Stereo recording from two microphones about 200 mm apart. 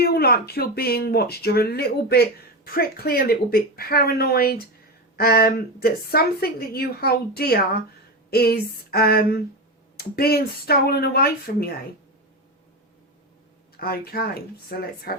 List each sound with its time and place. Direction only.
0.0 s speech: 50° left (ahead or behind)
13.7 s speech: 50° left (ahead or behind)